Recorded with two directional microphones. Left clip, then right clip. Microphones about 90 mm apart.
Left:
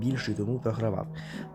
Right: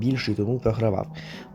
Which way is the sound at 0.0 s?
20° right (ahead or behind).